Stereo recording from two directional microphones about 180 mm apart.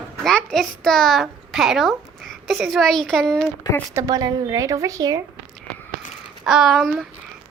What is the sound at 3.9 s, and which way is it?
A woman's voice, 20° right (ahead or behind).